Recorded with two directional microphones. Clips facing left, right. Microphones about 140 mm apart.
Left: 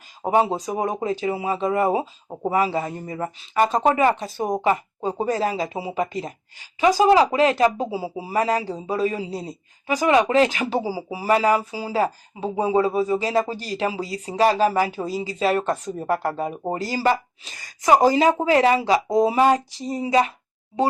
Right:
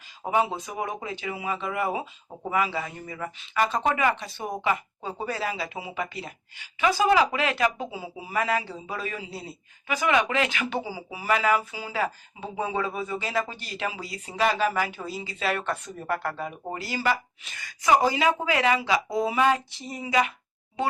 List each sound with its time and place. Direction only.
0.2 s speech: 35° left (ahead or behind)